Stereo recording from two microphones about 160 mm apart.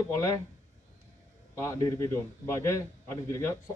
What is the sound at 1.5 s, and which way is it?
A man's voice, 20° left (ahead or behind).